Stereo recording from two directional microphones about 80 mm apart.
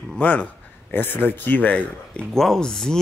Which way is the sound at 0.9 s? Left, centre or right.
Left.